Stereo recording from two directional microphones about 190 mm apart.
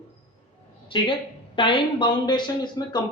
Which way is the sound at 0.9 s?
25° left (ahead or behind).